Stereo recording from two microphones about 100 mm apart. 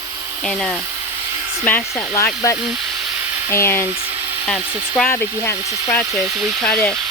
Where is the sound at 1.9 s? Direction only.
30° left (ahead or behind).